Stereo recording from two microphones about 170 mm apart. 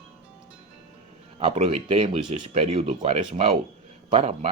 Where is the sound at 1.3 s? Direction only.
35° right (ahead or behind).